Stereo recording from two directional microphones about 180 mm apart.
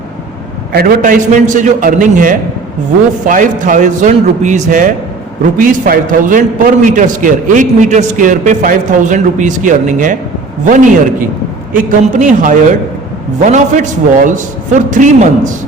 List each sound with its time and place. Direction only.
0.7 s a man's voice: 55° right (ahead or behind)